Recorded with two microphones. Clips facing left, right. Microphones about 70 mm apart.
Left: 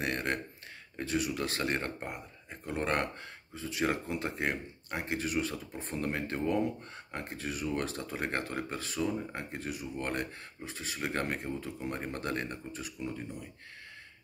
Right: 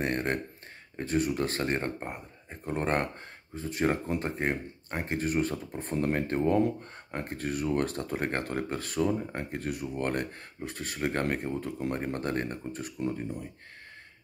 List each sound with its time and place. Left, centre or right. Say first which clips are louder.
0.0 s speech: right 3 dB; right